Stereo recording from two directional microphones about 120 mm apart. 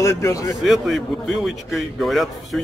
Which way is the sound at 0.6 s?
Centre (ahead or behind).